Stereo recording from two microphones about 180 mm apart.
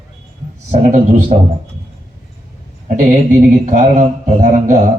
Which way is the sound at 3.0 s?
45° right (ahead or behind).